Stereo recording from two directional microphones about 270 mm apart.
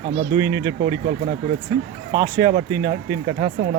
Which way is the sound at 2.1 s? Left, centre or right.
Centre.